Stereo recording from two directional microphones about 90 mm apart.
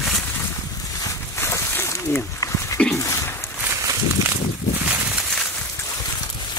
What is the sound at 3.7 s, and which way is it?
Walk, 35° right (ahead or behind).